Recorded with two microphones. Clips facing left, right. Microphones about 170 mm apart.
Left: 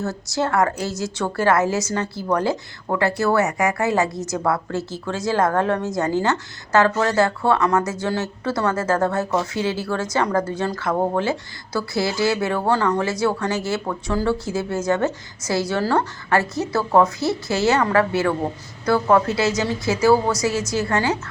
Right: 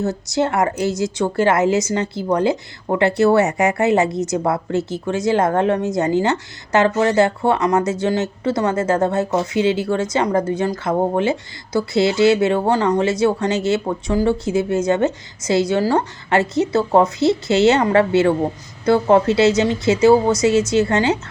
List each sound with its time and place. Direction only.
0.0 s a woman's voice: 20° right (ahead or behind)